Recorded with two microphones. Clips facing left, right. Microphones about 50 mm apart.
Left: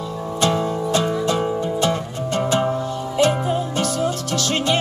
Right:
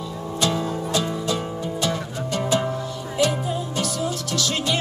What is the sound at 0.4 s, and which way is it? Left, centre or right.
Music, left.